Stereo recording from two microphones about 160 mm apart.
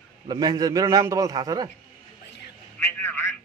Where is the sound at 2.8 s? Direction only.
15° left (ahead or behind).